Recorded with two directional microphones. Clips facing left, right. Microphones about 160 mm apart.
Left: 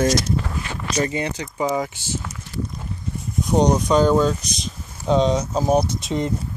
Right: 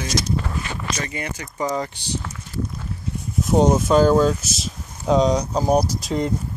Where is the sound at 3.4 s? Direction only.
5° right (ahead or behind).